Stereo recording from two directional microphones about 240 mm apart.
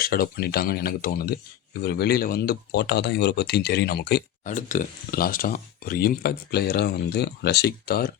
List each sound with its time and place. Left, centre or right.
0.0 s speech: left